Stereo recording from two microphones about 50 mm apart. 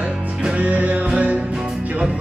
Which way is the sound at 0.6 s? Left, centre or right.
Right.